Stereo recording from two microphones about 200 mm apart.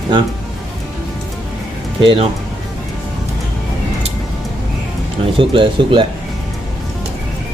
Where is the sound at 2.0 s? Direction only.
25° right (ahead or behind).